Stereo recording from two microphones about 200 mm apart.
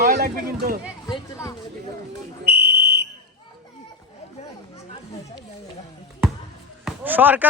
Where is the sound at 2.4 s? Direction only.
50° right (ahead or behind).